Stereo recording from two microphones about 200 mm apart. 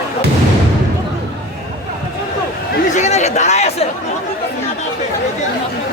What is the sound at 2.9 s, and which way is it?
Chatter, 35° left (ahead or behind).